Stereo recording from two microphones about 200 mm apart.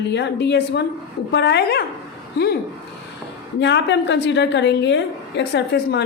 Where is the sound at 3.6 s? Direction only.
60° left (ahead or behind).